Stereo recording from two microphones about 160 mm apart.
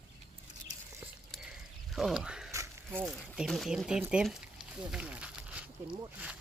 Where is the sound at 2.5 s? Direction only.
20° right (ahead or behind).